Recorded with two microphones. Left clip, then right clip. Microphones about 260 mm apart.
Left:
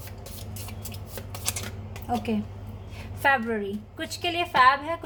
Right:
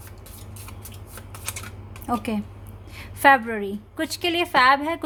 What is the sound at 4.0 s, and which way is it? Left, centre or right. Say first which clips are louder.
Speech: right 4 dB; right.